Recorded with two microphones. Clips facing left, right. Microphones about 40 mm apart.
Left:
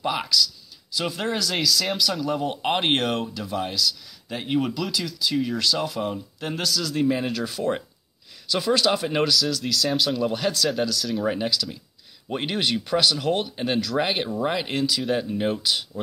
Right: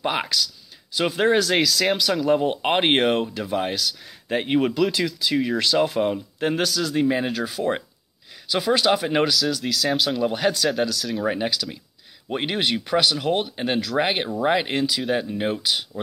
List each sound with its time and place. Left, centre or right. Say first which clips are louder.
0.0 s speech: even; right
2.0 s speech: right 5 dB; centre
5.0 s speech: right 3 dB; centre
5.6 s speech: right 5 dB; right
10.7 s speech: right 1 dB; centre